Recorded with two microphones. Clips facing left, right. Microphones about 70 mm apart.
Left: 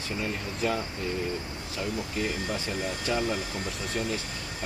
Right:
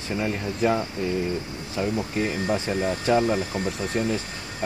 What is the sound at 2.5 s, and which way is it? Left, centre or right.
Speech, right.